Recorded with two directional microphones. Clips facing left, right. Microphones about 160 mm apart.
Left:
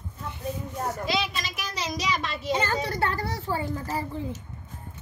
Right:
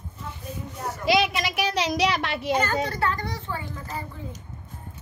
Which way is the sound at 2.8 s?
30° left (ahead or behind).